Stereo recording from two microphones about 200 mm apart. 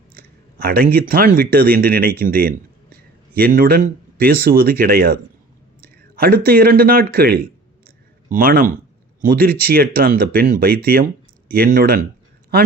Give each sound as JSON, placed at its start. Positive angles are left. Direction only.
{"t": 0.1, "sound": "speech", "side_deg": -50}